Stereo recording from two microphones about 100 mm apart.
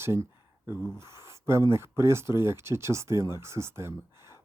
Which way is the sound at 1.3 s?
25° right (ahead or behind).